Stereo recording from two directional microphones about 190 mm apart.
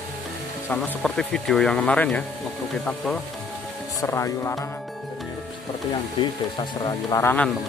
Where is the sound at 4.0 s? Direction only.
15° left (ahead or behind).